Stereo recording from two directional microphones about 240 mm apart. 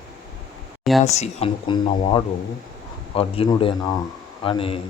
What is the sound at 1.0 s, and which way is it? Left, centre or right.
Speech, left.